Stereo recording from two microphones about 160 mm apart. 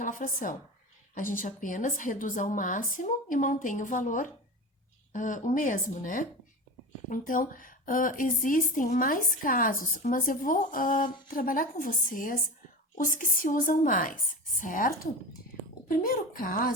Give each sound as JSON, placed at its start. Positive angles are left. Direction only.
{"t": 0.0, "sound": "a woman's voice", "side_deg": 55}